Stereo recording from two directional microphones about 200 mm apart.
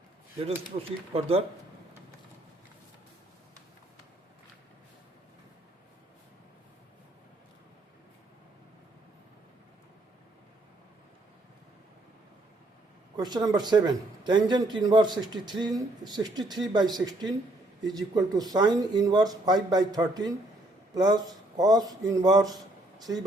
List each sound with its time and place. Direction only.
0.7 s speech: 30° right (ahead or behind)
13.1 s a man's voice: 20° right (ahead or behind)